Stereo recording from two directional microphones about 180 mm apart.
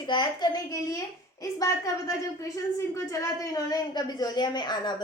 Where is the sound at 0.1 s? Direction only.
25° left (ahead or behind).